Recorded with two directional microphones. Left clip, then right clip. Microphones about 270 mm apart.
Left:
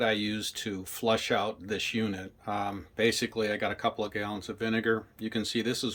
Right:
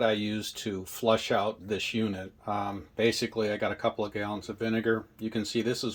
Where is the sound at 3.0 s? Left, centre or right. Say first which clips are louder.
Even; left.